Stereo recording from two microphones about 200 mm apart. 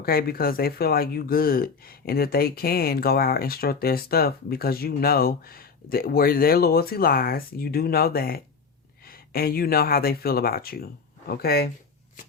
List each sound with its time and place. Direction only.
0.0 s speech: 50° left (ahead or behind)